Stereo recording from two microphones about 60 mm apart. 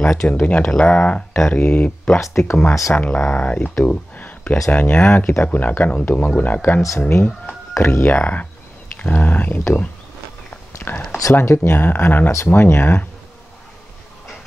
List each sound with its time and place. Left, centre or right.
0.0 s speech: centre
2.1 s speech: left
2.9 s speech: left
3.8 s a sound: left
4.6 s speech: left
7.0 s speech: left
8.0 s speech: left
10.5 s whispering: left
11.3 s speech: left